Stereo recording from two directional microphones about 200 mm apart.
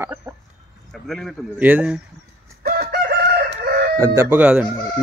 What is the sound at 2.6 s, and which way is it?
Chicken, 50° right (ahead or behind).